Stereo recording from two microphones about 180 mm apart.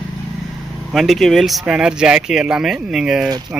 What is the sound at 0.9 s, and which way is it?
Speech, centre (ahead or behind).